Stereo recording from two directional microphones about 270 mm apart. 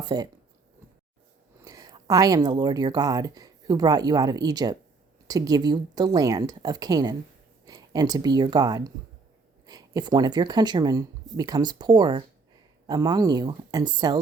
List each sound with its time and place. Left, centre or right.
0.0 s speech: centre
1.6 s speech: centre